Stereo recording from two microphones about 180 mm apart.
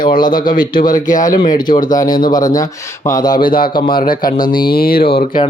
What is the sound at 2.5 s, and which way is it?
Speech, 20° left (ahead or behind).